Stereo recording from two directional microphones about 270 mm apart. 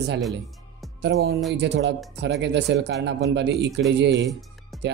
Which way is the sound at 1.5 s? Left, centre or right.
Right.